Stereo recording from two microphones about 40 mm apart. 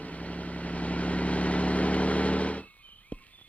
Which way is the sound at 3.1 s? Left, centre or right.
Left.